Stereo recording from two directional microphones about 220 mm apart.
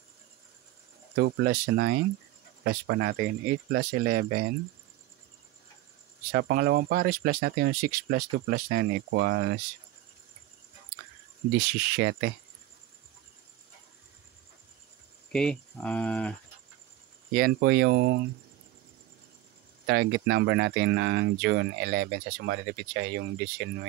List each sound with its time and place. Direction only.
1.1 s speech: 45° right (ahead or behind)
6.3 s speech: 45° right (ahead or behind)
11.5 s speech: 50° right (ahead or behind)
15.3 s speech: 5° left (ahead or behind)
17.3 s speech: 45° right (ahead or behind)
19.9 s speech: 55° right (ahead or behind)